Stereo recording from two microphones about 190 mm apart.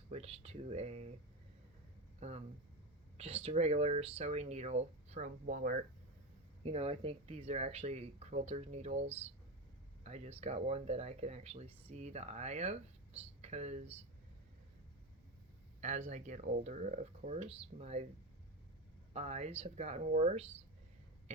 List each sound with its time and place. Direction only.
0.1 s speech: 30° right (ahead or behind)
3.2 s speech: 30° right (ahead or behind)
6.6 s speech: 30° right (ahead or behind)
15.8 s speech: 40° right (ahead or behind)
19.1 s speech: 35° right (ahead or behind)